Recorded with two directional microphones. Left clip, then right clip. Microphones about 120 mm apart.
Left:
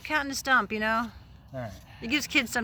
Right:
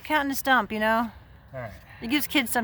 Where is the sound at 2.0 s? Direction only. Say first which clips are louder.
Right 1 dB; 65° right (ahead or behind).